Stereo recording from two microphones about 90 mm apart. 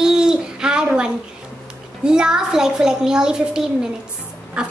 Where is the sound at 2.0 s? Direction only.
10° right (ahead or behind).